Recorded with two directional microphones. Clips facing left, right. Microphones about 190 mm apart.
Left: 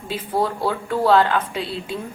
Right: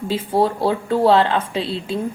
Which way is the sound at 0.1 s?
30° right (ahead or behind).